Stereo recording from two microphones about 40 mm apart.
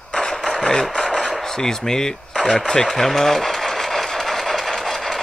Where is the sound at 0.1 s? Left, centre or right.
Left.